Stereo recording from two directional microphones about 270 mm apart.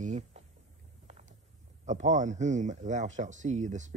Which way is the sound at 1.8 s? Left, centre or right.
Right.